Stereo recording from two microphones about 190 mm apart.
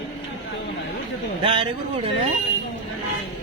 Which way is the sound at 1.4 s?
25° right (ahead or behind).